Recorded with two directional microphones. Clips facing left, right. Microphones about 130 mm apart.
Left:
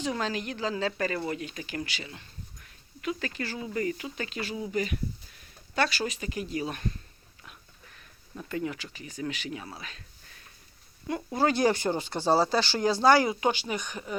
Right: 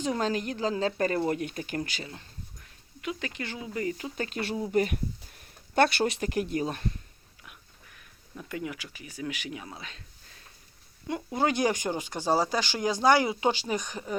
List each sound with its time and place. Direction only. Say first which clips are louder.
0.0 s speech: right 2 dB; 40° right (ahead or behind)
3.0 s speech: left 2 dB; 20° right (ahead or behind)
3.9 s speech: right 2 dB; 35° right (ahead or behind)
4.4 s speech: right 4 dB; 50° right (ahead or behind)
6.6 s speech: right 2 dB; 30° right (ahead or behind)
8.4 s speech: left 3 dB; 10° right (ahead or behind)
11.1 s speech: left 1 dB; 20° right (ahead or behind)
13.5 s speech: right 1 dB; 35° right (ahead or behind)